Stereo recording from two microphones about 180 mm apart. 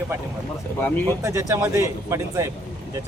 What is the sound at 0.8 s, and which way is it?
Speech, 10° left (ahead or behind).